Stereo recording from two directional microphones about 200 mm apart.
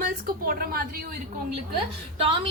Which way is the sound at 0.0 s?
45° right (ahead or behind).